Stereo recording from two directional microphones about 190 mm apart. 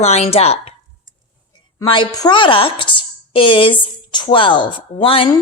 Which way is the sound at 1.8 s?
25° left (ahead or behind).